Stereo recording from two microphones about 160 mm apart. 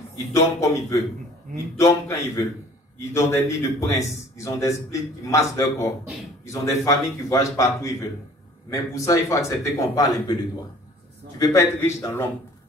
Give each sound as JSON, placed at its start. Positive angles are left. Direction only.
{"t": 0.6, "sound": "a man's voice", "side_deg": 20}
{"t": 11.3, "sound": "a man's voice", "side_deg": 20}